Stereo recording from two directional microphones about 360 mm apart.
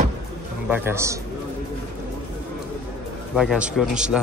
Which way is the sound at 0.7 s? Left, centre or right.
Centre.